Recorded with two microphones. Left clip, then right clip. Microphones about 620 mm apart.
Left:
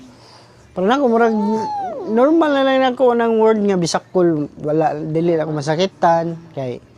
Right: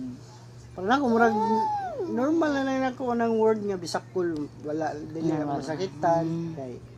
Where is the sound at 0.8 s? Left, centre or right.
Left.